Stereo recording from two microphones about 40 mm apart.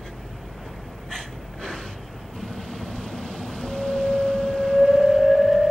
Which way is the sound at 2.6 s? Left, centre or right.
Centre.